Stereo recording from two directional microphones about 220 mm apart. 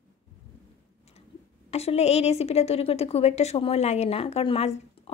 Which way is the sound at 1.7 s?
30° left (ahead or behind).